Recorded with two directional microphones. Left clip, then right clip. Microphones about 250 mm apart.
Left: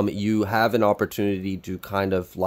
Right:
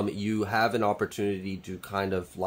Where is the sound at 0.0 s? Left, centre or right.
Left.